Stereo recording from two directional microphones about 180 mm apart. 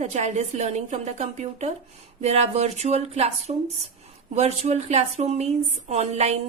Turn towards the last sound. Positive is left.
turn(degrees=-40)  # may be behind; listen again after turning